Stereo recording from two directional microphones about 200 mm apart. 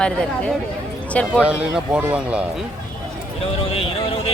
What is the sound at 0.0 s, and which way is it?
Speech, 5° left (ahead or behind).